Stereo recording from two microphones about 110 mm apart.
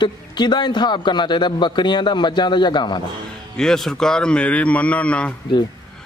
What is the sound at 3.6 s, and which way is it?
Speech, 5° left (ahead or behind).